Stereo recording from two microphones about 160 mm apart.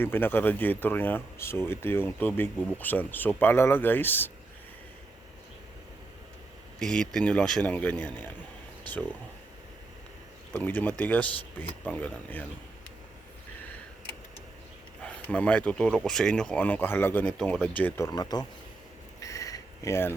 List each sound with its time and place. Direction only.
0.0 s speech: 15° left (ahead or behind)
6.7 s speech: 5° left (ahead or behind)
10.5 s speech: 10° left (ahead or behind)
15.0 s speech: 5° left (ahead or behind); by 18.4 s 25° left (ahead or behind)
19.2 s a sound: 20° left (ahead or behind)